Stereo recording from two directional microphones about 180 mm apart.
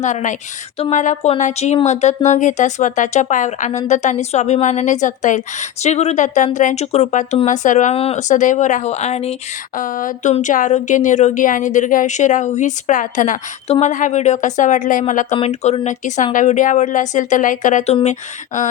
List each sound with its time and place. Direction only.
0.0 s speech: 40° left (ahead or behind)
9.7 s speech: 50° left (ahead or behind)